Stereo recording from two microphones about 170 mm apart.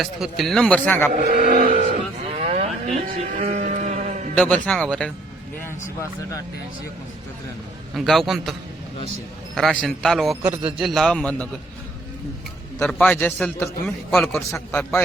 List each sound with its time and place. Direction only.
0.0 s a man's voice: centre (ahead or behind)
1.1 s speech: 55° right (ahead or behind)
1.7 s a sound: 45° right (ahead or behind)
2.4 s sheep: 40° right (ahead or behind)
4.4 s speech: 5° left (ahead or behind)
5.6 s speech: 15° left (ahead or behind)
7.9 s a man's voice: centre (ahead or behind)
9.6 s a man's voice: centre (ahead or behind)
12.8 s a man's voice: 5° left (ahead or behind)